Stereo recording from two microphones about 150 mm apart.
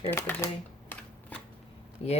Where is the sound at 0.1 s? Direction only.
15° left (ahead or behind).